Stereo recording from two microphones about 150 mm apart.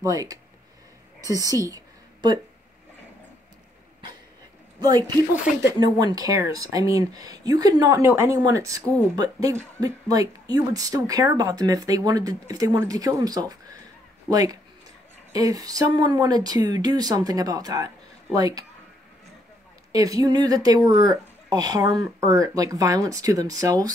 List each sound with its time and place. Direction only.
0.0 s speech: 25° right (ahead or behind)
4.7 s speech: 25° right (ahead or behind)
19.9 s speech: 25° right (ahead or behind)